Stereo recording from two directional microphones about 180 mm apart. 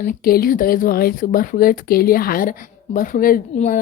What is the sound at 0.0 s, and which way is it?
Speech, 55° left (ahead or behind).